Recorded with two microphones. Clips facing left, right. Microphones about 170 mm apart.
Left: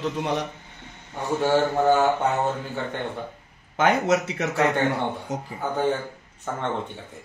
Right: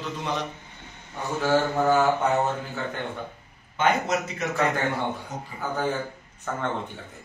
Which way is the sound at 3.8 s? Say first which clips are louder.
Left 3 dB; 80° left.